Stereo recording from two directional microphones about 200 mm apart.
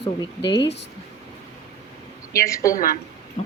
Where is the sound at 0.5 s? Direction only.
60° left (ahead or behind).